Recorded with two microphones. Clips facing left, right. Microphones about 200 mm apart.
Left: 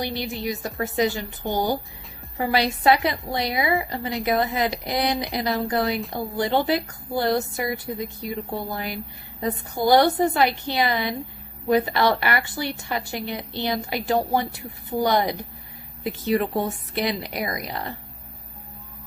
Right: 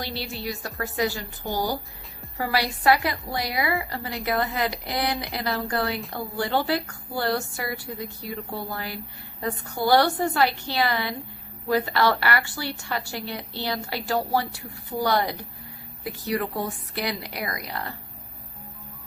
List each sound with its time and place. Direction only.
0.0 s a woman's voice: 15° left (ahead or behind)